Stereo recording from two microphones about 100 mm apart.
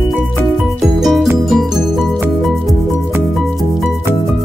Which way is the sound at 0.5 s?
5° right (ahead or behind).